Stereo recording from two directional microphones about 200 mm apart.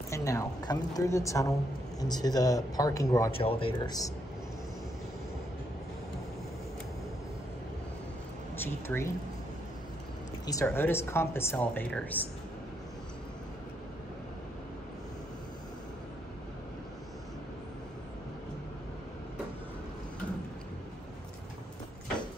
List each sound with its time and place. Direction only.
0.1 s speech: 15° left (ahead or behind)
3.3 s speech: 25° left (ahead or behind)
8.5 s speech: 10° left (ahead or behind)
10.4 s speech: 15° left (ahead or behind)